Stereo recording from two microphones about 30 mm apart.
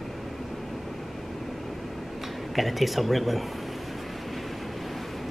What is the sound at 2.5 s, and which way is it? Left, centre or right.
Speech, centre.